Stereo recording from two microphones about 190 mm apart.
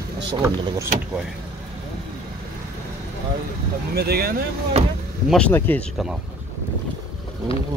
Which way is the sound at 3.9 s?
55° right (ahead or behind).